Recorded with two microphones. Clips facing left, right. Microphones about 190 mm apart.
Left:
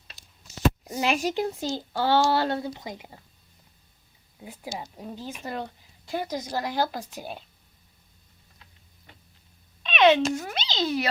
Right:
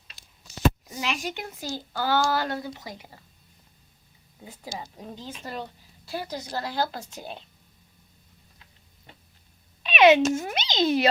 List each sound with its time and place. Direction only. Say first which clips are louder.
0.9 s speech: left 6 dB; 45° left (ahead or behind); by 3.2 s 20° left (ahead or behind)
4.4 s a woman's voice: left 2 dB; 10° left (ahead or behind)
9.8 s a sound: right 2 dB; 10° right (ahead or behind)
10.3 s a child's voice: right 3 dB; 20° right (ahead or behind)